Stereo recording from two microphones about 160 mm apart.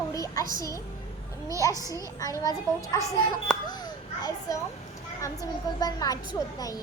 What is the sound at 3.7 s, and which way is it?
Children playing, 25° left (ahead or behind).